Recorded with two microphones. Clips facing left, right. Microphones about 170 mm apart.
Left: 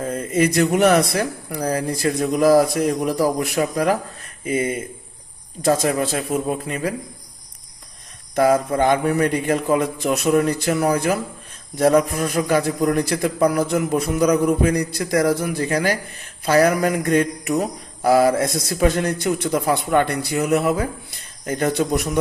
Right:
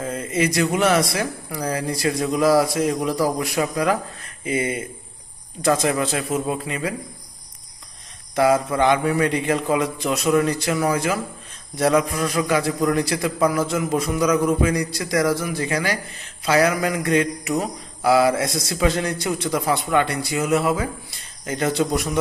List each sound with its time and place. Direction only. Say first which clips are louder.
0.0 s a sound: left 3 dB; 35° left (ahead or behind)
0.4 s speech: left 3 dB; 55° left (ahead or behind)
0.9 s speech: left 3 dB; 45° left (ahead or behind)
5.6 s speech: left 1 dB; 45° left (ahead or behind)
8.4 s speech: left 1 dB; 45° left (ahead or behind)
13.9 s speech: left 1 dB; 60° left (ahead or behind)
16.5 s speech: left 3 dB; 40° left (ahead or behind)
20.3 s speech: left 1 dB; 60° left (ahead or behind)